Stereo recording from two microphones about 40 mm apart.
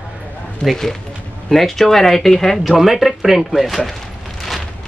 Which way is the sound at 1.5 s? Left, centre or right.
Centre.